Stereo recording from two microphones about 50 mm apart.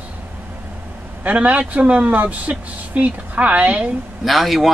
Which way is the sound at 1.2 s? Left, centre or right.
Right.